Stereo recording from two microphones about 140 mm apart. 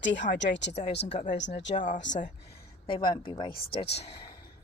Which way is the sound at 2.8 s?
35° left (ahead or behind).